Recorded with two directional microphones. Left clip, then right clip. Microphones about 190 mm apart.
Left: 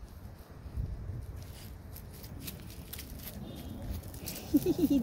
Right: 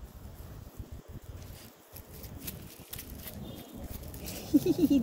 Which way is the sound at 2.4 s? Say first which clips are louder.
Even; 25° right (ahead or behind).